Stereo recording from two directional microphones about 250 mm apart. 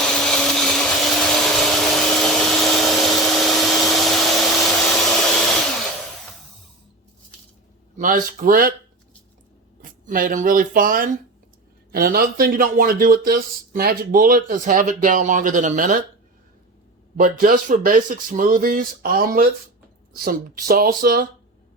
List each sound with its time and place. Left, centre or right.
0.0 s vacuum cleaner: centre
7.9 s speech: right
9.8 s speech: right
17.2 s speech: right